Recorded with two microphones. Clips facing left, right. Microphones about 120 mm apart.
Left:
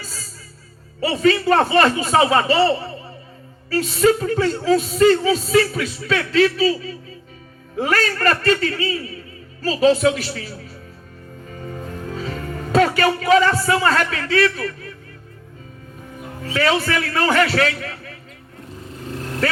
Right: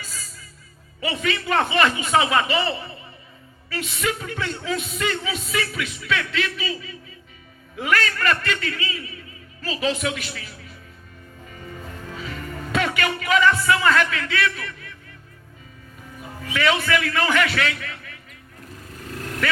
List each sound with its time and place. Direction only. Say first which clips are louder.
0.0 s music: left 3 dB; 35° left (ahead or behind)
1.0 s speech: left 9 dB; 35° left (ahead or behind)
11.5 s music: left 6 dB; 40° left (ahead or behind)
11.9 s a man's voice: left 6 dB; 40° left (ahead or behind)
16.4 s speech: left 3 dB; 35° left (ahead or behind)
18.9 s vehicle: left 4 dB; 25° left (ahead or behind)